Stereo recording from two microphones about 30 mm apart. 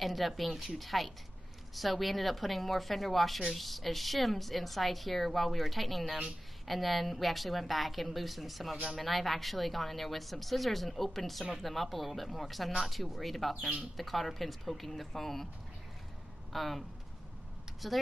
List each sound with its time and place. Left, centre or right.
0.0 s a woman's voice: centre
16.5 s a woman's voice: centre
17.8 s a woman's voice: centre